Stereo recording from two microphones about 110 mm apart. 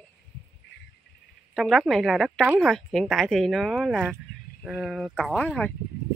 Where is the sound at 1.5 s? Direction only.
Centre (ahead or behind).